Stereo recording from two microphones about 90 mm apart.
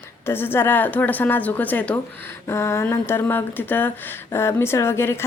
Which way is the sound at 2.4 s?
30° left (ahead or behind).